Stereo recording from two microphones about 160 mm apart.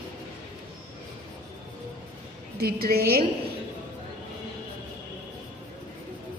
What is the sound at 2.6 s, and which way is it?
Speech, 70° right (ahead or behind).